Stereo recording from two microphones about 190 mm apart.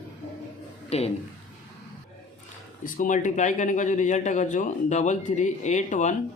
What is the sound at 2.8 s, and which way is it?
Speech, 45° left (ahead or behind).